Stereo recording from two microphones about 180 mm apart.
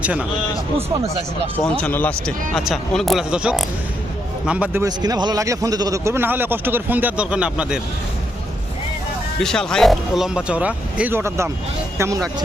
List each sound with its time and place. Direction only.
0.0 s a man's voice: 5° right (ahead or behind)
1.8 s a man's voice: 10° left (ahead or behind); by 4.8 s 5° right (ahead or behind)
4.8 s a man's voice: 20° right (ahead or behind); by 7.8 s 5° right (ahead or behind)
9.4 s a man's voice: 5° left (ahead or behind); by 12.3 s 15° right (ahead or behind)